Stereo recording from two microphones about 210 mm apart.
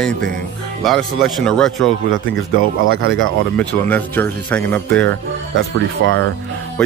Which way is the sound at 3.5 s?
5° left (ahead or behind).